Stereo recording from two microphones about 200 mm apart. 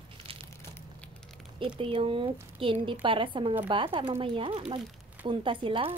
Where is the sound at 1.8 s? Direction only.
25° right (ahead or behind).